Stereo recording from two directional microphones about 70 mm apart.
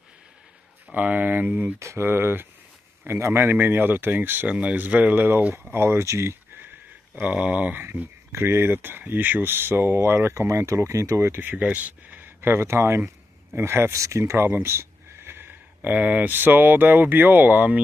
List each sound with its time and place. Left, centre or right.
0.8 s speech: centre
1.8 s speech: right
2.0 s speech: right
7.2 s speech: centre